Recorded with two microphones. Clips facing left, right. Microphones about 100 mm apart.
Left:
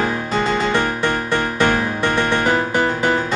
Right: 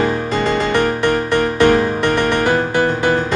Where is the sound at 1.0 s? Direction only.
15° left (ahead or behind).